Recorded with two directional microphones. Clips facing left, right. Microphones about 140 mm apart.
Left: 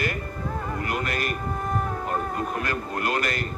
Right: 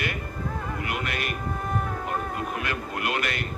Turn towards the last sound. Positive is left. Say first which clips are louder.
# left 2 dB
turn(degrees=40)  # may be behind; listen again after turning